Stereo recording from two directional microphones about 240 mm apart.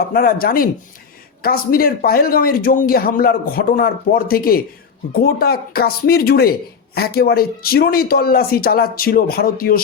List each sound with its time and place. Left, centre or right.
0.1 s speech: left